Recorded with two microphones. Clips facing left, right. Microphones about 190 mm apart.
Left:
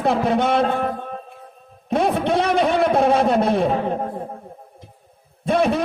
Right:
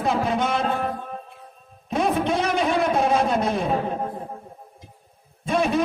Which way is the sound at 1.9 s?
60° left (ahead or behind).